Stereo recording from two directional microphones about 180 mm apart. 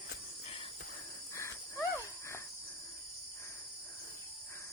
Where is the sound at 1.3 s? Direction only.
15° left (ahead or behind).